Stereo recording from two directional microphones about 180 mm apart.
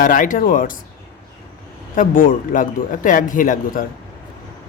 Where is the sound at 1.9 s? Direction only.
50° left (ahead or behind).